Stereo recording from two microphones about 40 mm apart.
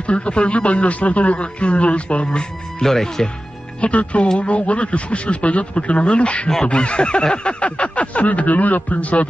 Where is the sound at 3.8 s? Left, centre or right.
Left.